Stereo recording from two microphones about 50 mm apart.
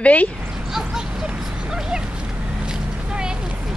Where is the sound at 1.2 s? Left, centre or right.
Centre.